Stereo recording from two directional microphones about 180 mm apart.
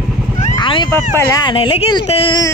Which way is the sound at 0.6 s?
25° left (ahead or behind).